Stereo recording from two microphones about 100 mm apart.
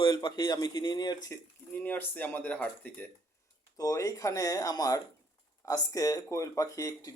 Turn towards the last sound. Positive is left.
turn(degrees=35)  # may be behind; listen again after turning